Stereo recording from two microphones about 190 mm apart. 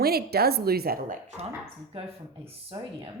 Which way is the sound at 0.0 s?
55° right (ahead or behind).